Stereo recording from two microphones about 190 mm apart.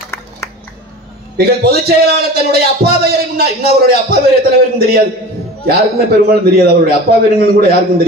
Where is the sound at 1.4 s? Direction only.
55° right (ahead or behind).